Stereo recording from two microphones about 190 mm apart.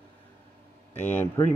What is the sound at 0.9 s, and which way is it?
Speech, 10° left (ahead or behind).